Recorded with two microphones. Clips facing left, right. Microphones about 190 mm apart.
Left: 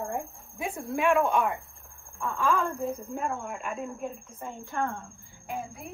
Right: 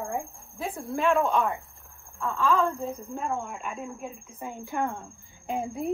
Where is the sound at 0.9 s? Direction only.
10° left (ahead or behind); by 5.9 s 20° right (ahead or behind).